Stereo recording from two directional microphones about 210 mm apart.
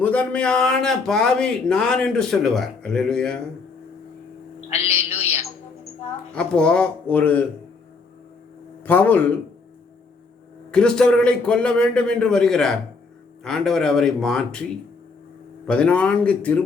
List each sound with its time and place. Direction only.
0.0 s speech: 5° left (ahead or behind)
4.7 s a man's voice: 30° left (ahead or behind)
6.3 s speech: 5° left (ahead or behind)
8.8 s a man's voice: 10° left (ahead or behind)
10.7 s speech: 5° left (ahead or behind)
15.6 s speech: 5° left (ahead or behind)